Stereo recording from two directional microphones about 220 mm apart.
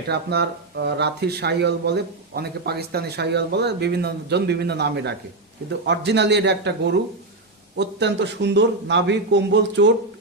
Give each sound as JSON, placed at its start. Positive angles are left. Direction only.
{"t": 0.1, "sound": "speech", "side_deg": -50}